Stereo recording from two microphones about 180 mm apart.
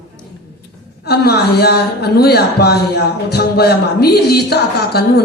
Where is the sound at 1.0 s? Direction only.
65° left (ahead or behind).